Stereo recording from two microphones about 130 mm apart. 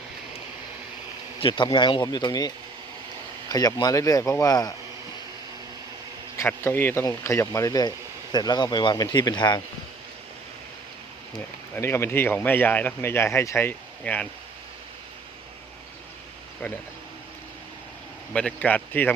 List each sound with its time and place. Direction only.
1.4 s speech: 40° left (ahead or behind)
3.5 s speech: 30° left (ahead or behind)
6.3 s speech: 20° left (ahead or behind)
11.7 s speech: 20° left (ahead or behind)
18.3 s speech: 10° left (ahead or behind)